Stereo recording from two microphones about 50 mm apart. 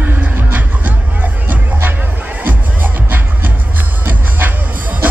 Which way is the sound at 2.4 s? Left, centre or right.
Right.